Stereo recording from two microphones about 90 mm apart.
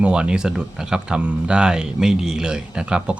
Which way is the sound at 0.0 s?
10° right (ahead or behind).